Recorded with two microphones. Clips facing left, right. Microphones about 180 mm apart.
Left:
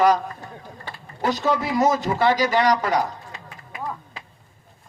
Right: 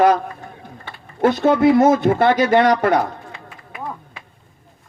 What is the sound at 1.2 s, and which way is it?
Speech, 55° right (ahead or behind).